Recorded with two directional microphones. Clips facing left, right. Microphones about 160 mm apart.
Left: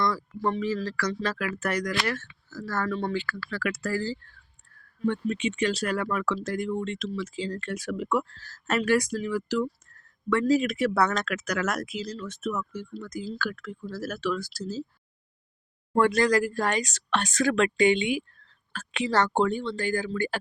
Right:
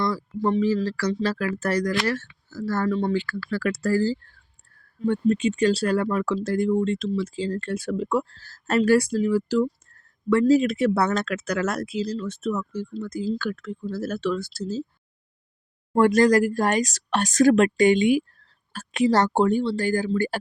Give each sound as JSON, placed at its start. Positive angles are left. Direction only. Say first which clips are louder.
{"t": 0.0, "sound": "a sound", "louder": "right 3 dB", "side_deg": -30}
{"t": 0.6, "sound": "speech", "louder": "right 6 dB", "side_deg": -30}
{"t": 16.0, "sound": "a woman's voice", "louder": "right 5 dB", "side_deg": -45}